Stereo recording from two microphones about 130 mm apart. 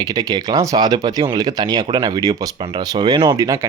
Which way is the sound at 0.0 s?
30° right (ahead or behind).